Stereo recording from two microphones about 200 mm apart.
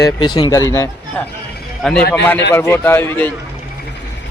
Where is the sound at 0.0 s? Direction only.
20° left (ahead or behind).